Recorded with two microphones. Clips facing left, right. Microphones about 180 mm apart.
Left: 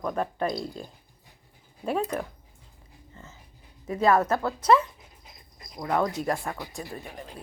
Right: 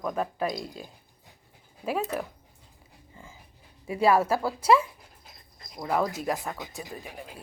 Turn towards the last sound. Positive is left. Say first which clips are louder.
# left 1 dB
turn(degrees=-5)  # may be behind; listen again after turning